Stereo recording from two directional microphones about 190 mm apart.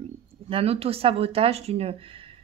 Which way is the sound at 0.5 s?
30° right (ahead or behind).